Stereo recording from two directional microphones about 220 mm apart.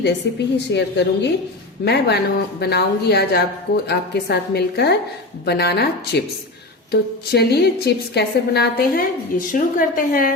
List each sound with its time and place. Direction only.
0.2 s a woman's voice: 50° left (ahead or behind)